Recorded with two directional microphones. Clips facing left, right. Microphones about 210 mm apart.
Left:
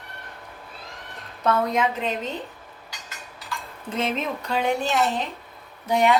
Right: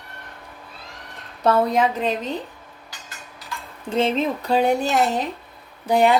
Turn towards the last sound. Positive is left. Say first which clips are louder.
# right 3 dB
turn(degrees=-30)  # may be behind; listen again after turning